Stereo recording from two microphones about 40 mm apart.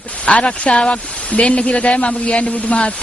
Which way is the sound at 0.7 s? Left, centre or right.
Centre.